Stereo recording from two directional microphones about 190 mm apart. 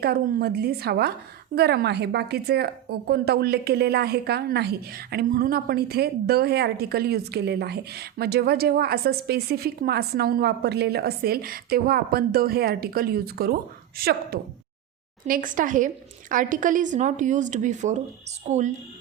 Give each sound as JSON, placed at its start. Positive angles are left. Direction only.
{"t": 0.0, "sound": "a woman's voice", "side_deg": -55}